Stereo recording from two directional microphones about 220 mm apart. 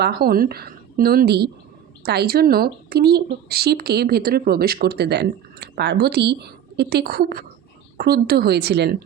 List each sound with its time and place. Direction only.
0.0 s speech: 45° right (ahead or behind)